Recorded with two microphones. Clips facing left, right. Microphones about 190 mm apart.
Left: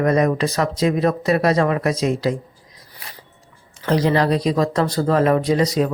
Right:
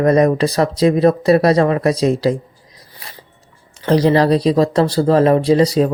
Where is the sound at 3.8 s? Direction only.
35° right (ahead or behind).